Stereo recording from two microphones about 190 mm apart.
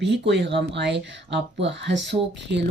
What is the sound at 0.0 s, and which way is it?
Speech, 65° right (ahead or behind).